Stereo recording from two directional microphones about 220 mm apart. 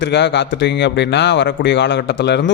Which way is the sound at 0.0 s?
50° left (ahead or behind).